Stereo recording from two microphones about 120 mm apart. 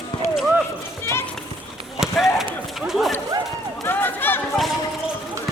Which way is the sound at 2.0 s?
Centre (ahead or behind).